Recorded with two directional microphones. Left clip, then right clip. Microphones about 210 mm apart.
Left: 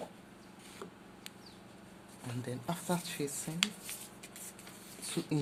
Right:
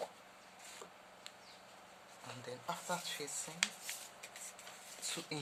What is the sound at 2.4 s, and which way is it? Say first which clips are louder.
Speech: left 3 dB; 25° left (ahead or behind).